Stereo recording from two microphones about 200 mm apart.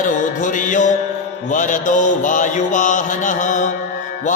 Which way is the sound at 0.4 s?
40° left (ahead or behind).